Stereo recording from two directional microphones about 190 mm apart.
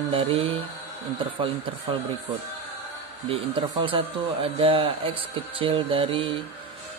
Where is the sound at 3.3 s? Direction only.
25° right (ahead or behind).